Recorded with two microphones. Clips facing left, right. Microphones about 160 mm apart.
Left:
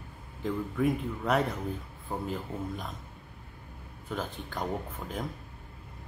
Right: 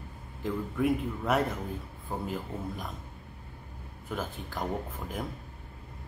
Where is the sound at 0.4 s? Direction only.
5° right (ahead or behind).